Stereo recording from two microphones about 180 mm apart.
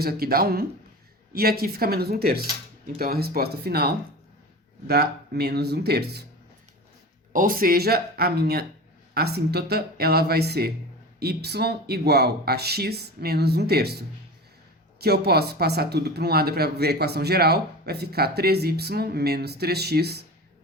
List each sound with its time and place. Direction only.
0.0 s speech: 60° right (ahead or behind)
7.3 s speech: 50° right (ahead or behind)